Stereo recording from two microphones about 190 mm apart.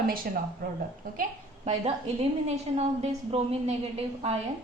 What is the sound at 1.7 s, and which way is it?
A woman's voice, 30° right (ahead or behind).